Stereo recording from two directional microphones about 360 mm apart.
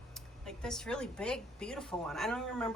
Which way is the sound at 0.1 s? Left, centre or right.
Centre.